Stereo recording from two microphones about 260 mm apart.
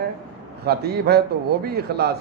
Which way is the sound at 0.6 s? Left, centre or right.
Right.